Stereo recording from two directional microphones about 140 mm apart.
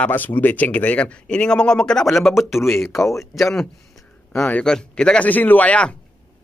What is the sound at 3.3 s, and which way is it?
Speech, 5° left (ahead or behind).